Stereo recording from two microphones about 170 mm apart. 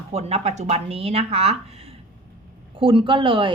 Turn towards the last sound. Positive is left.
turn(degrees=-30)  # may be behind; listen again after turning